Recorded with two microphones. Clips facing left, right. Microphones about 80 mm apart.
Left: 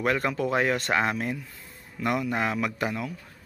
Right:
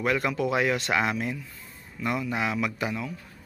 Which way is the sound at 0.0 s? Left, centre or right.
Left.